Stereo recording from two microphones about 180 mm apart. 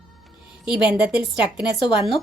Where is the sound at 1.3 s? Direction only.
25° left (ahead or behind).